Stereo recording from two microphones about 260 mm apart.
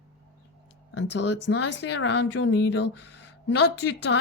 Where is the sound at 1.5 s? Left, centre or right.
Left.